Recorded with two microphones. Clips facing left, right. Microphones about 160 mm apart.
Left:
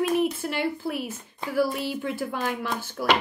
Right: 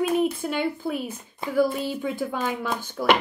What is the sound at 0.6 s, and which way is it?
Speech, 5° left (ahead or behind).